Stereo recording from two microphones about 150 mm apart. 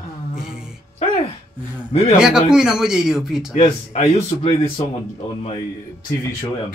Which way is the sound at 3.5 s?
45° left (ahead or behind).